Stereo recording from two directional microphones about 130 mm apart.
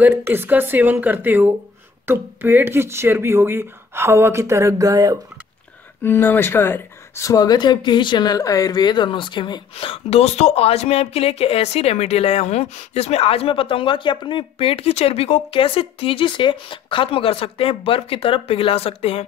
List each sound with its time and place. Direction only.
0.0 s speech: 20° right (ahead or behind)
6.0 s speech: 15° left (ahead or behind); by 19.2 s 50° left (ahead or behind)